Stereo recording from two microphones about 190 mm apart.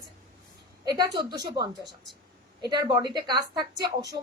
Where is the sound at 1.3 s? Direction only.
20° right (ahead or behind).